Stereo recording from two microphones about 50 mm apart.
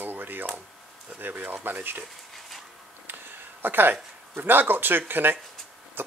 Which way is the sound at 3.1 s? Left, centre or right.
Right.